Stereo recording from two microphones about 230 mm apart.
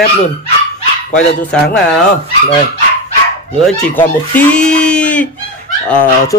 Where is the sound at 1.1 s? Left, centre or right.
Left.